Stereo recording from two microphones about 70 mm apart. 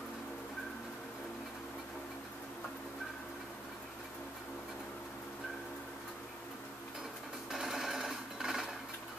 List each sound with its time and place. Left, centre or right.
7.5 s sewing machine: centre